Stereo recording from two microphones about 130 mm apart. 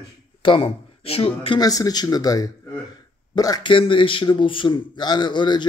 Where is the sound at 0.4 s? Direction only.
40° left (ahead or behind).